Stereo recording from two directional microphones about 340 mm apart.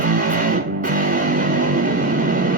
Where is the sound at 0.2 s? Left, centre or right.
Right.